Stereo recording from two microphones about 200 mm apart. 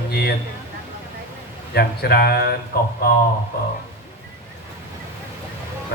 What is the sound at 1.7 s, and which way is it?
Speech, 50° left (ahead or behind).